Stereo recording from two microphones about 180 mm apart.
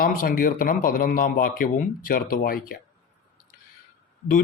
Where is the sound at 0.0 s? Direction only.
50° left (ahead or behind).